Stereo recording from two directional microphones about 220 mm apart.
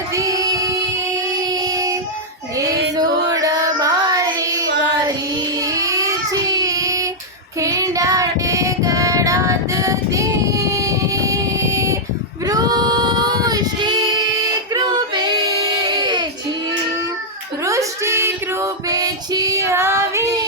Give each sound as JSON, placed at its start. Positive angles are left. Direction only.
{"t": 0.1, "sound": "child singing", "side_deg": -15}
{"t": 14.7, "sound": "female singing", "side_deg": -20}
{"t": 15.9, "sound": "a sound", "side_deg": -20}
{"t": 17.7, "sound": "female singing", "side_deg": -15}